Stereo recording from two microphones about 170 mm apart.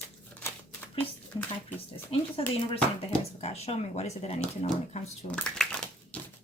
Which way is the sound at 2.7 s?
35° left (ahead or behind).